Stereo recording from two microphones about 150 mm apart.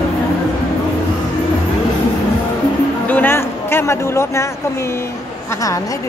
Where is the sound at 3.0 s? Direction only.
10° left (ahead or behind).